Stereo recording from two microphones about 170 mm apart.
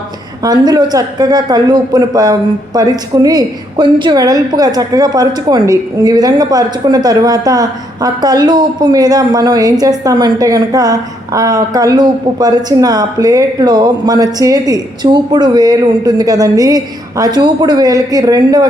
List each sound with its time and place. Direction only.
0.4 s a man's voice: 25° right (ahead or behind)